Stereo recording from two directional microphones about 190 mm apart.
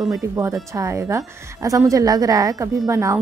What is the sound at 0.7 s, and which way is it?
A woman's voice, 15° right (ahead or behind).